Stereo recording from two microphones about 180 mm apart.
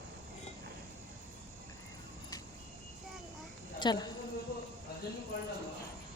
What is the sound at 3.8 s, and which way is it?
Speech, 25° left (ahead or behind).